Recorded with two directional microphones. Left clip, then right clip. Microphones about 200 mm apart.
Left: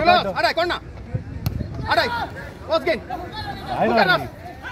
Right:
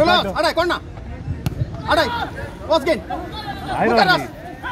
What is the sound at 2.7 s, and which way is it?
Speech, 60° right (ahead or behind).